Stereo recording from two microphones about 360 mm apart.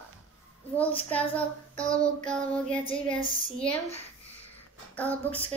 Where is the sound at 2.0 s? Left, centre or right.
Centre.